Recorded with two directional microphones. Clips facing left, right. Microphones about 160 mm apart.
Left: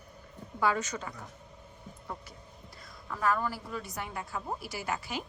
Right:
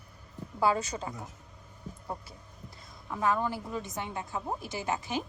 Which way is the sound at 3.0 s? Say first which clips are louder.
Right 1 dB; 20° right (ahead or behind).